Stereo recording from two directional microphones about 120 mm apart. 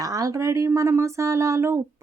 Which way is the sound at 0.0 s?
30° right (ahead or behind).